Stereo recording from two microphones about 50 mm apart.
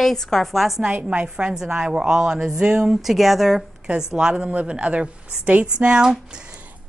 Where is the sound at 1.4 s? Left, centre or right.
Centre.